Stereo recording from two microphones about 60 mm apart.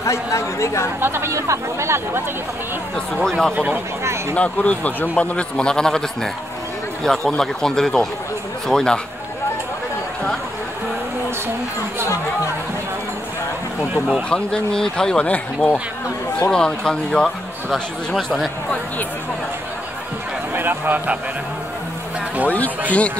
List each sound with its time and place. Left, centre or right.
0.0 s a woman's voice: left
1.0 s speech: right
3.3 s speech: centre
3.5 s speech: right
4.0 s a sound: right
4.4 s a man's voice: left
14.3 s speech: centre
20.5 s a sound: right
22.8 s a man's voice: left